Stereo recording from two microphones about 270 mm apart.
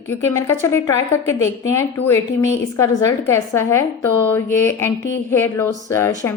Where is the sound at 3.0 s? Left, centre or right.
Centre.